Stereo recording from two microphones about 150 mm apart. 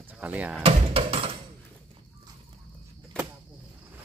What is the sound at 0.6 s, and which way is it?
Speech, 40° right (ahead or behind).